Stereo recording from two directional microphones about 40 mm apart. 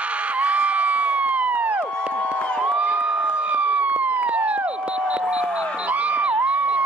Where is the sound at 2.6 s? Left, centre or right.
Right.